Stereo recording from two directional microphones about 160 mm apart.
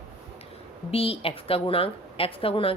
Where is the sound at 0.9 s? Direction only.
35° left (ahead or behind).